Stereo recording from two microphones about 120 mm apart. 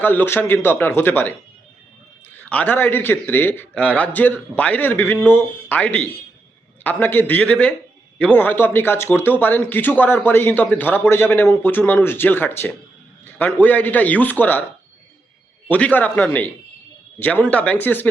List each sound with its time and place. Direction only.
0.0 s a man's voice: 15° left (ahead or behind)
2.3 s a man's voice: 10° left (ahead or behind)
15.7 s a man's voice: 15° left (ahead or behind)